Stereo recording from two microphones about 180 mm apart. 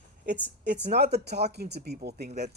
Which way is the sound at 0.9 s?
65° right (ahead or behind).